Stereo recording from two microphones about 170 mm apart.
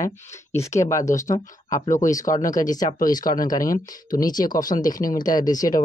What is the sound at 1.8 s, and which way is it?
Speech, 45° left (ahead or behind).